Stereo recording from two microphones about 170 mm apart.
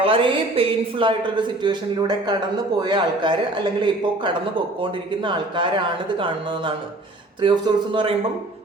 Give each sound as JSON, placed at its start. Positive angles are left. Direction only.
{"t": 0.0, "sound": "a man's voice", "side_deg": -30}